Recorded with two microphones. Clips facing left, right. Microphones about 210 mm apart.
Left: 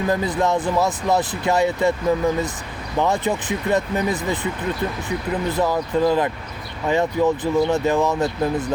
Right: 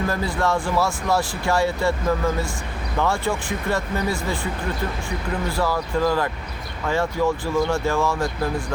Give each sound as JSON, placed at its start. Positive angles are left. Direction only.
{"t": 0.1, "sound": "speech", "side_deg": 20}